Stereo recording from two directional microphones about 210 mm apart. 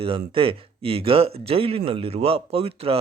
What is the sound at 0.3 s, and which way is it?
A man's voice, 25° right (ahead or behind).